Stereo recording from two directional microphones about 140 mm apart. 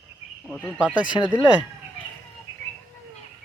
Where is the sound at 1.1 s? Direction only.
30° left (ahead or behind).